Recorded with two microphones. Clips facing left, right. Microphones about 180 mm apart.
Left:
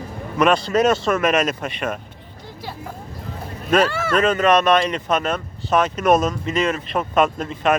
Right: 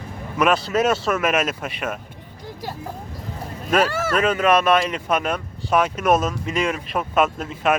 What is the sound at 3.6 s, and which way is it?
Speech, 10° right (ahead or behind).